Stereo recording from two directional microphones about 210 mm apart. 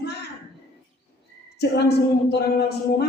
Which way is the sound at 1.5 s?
50° left (ahead or behind).